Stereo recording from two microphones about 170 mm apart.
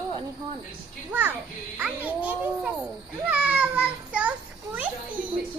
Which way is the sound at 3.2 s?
5° right (ahead or behind).